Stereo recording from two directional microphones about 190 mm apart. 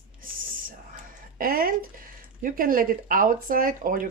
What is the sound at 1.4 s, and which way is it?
Speech, 50° right (ahead or behind).